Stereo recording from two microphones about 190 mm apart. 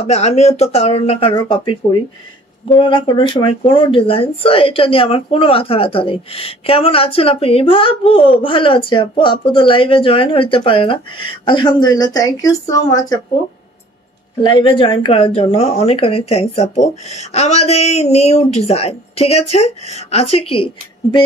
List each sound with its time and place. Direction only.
0.0 s speech: 35° left (ahead or behind)
2.7 s speech: 25° left (ahead or behind)
14.4 s speech: 25° left (ahead or behind)